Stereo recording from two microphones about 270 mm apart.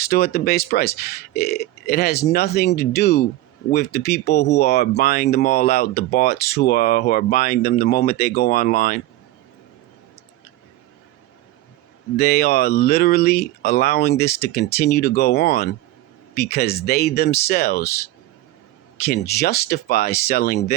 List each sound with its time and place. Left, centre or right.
0.0 s speech: left
12.1 s speech: left
18.9 s speech: left